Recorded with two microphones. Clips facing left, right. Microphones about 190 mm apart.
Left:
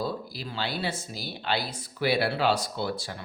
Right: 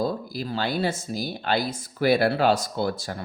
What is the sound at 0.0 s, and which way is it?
Speech, 45° right (ahead or behind).